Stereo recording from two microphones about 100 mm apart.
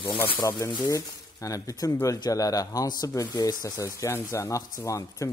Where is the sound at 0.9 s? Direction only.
35° left (ahead or behind).